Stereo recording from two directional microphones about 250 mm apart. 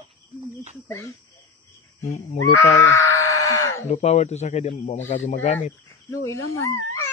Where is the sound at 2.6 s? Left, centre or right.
Centre.